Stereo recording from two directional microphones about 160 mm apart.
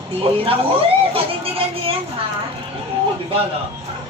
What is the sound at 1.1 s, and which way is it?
Music, 35° right (ahead or behind).